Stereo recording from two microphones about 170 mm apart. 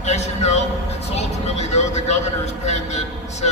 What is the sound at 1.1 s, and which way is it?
Vehicle, 40° left (ahead or behind).